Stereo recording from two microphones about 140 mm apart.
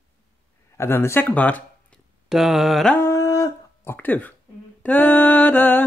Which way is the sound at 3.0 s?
20° left (ahead or behind).